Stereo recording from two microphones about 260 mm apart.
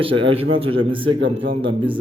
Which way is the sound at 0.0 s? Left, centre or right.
Centre.